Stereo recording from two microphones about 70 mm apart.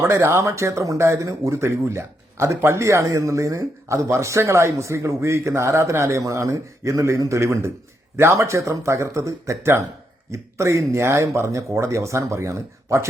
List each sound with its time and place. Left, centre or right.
0.0 s speech: right